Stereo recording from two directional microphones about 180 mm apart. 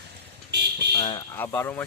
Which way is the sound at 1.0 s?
25° left (ahead or behind).